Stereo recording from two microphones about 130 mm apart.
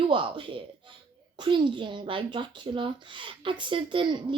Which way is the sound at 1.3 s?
40° right (ahead or behind).